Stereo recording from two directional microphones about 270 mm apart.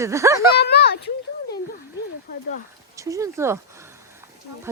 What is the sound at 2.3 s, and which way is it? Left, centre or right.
Speech, left.